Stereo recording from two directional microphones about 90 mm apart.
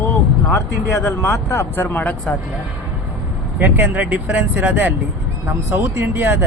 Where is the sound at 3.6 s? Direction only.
20° right (ahead or behind).